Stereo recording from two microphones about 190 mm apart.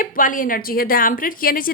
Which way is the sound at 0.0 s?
45° left (ahead or behind).